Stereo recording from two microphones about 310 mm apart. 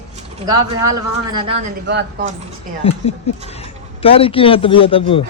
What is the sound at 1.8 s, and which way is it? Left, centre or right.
Speech, right.